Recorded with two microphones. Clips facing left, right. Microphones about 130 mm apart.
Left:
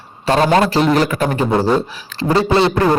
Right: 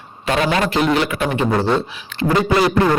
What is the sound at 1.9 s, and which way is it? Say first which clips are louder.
Speech: left 2 dB; 40° left (ahead or behind).